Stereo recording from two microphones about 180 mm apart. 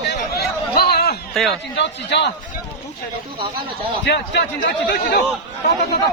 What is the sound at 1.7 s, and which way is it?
Speech, 70° left (ahead or behind).